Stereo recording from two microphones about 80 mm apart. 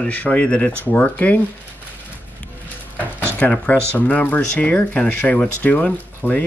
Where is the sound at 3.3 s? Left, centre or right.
Centre.